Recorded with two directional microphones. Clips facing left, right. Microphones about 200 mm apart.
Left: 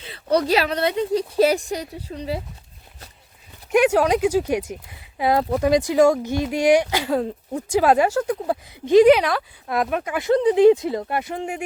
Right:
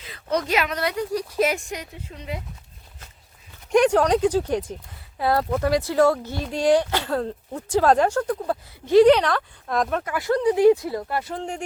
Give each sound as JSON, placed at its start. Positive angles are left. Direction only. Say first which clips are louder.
{"t": 0.0, "sound": "speech", "louder": "left 5 dB", "side_deg": 30}
{"t": 3.7, "sound": "speech", "louder": "even", "side_deg": 5}
{"t": 10.0, "sound": "speech", "louder": "left 3 dB", "side_deg": 20}